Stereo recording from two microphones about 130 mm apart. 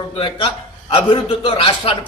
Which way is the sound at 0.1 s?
45° left (ahead or behind).